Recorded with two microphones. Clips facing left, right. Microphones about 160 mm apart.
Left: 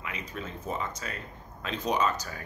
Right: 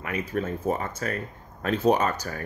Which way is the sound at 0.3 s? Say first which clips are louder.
Right 9 dB; 50° right (ahead or behind).